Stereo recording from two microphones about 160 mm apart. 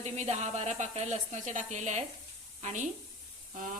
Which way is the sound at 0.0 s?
45° right (ahead or behind).